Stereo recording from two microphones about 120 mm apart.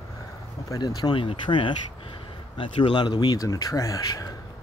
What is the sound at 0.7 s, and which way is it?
Speech, 30° left (ahead or behind).